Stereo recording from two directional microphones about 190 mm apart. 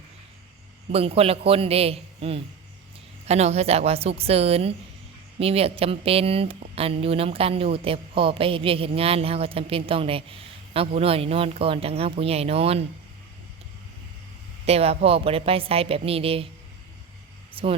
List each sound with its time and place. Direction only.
0.9 s a woman's voice: 30° right (ahead or behind)
14.6 s speech: 30° right (ahead or behind)